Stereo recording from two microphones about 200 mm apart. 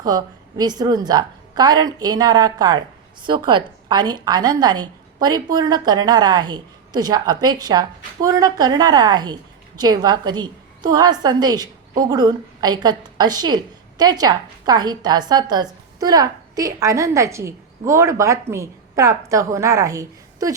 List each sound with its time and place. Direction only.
0.0 s a woman's voice: 20° right (ahead or behind)